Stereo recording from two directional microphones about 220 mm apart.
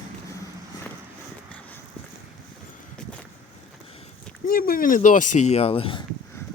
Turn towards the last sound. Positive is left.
turn(degrees=25)  # may be behind; listen again after turning